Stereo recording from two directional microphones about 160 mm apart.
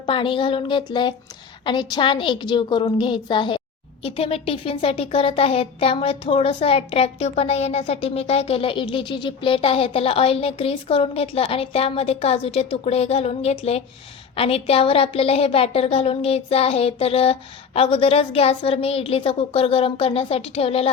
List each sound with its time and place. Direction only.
0.0 s a woman's voice: 30° left (ahead or behind)